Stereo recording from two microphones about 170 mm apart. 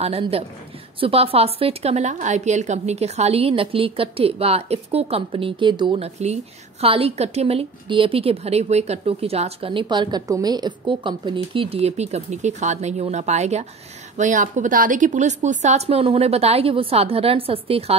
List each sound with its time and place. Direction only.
0.0 s a woman's voice: 35° right (ahead or behind)